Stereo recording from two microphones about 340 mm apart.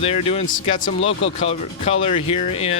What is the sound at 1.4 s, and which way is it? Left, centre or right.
Speech, centre.